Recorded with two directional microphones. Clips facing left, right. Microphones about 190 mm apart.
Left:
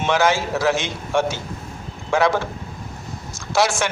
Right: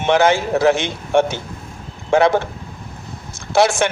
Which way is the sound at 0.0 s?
55° right (ahead or behind).